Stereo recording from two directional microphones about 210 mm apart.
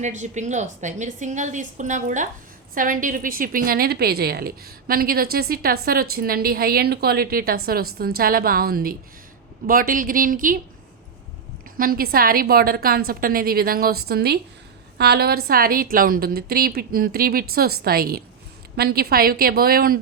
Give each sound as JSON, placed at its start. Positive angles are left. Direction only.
{"t": 0.0, "sound": "a woman's voice", "side_deg": -35}
{"t": 11.8, "sound": "a woman's voice", "side_deg": -45}